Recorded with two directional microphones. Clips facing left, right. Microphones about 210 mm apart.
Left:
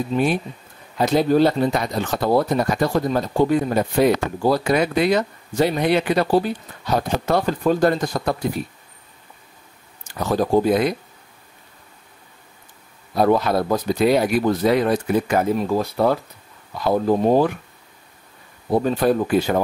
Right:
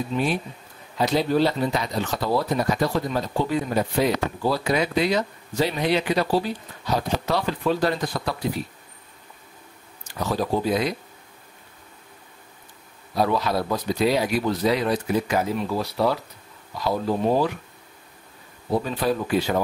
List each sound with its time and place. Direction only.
0.1 s speech: 35° left (ahead or behind)
0.9 s speech: 50° left (ahead or behind)
10.2 s speech: 50° left (ahead or behind)
13.1 s speech: 55° left (ahead or behind)
18.7 s speech: 50° left (ahead or behind)